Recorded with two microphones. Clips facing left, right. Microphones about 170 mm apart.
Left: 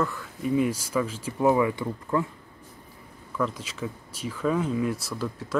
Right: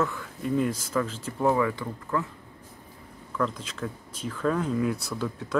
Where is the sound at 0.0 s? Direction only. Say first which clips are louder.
Even; centre (ahead or behind); by 2.2 s 20° left (ahead or behind).